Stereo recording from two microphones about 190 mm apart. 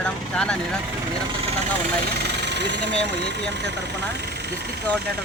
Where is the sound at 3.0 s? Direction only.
65° right (ahead or behind).